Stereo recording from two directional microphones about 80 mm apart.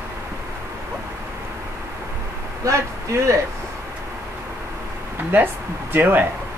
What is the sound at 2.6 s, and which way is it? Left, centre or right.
Speech, right.